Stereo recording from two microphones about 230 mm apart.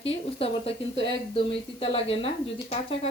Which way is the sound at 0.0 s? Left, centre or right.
Left.